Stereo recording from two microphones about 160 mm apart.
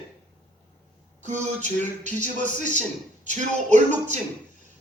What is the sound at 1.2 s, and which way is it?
A man's voice, 50° right (ahead or behind).